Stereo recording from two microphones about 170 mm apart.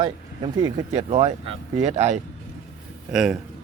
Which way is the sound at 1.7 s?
45° right (ahead or behind).